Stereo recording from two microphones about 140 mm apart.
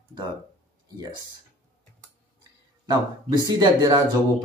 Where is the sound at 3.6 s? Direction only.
30° right (ahead or behind).